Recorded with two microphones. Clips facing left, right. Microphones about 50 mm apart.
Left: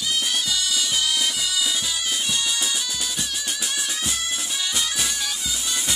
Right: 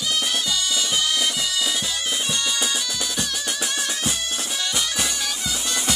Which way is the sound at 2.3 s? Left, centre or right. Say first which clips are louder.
Right 1 dB; right.